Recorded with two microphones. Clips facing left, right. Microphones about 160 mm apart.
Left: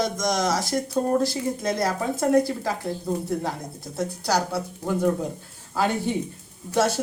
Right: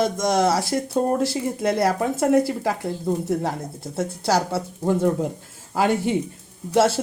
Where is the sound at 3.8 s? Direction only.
25° right (ahead or behind).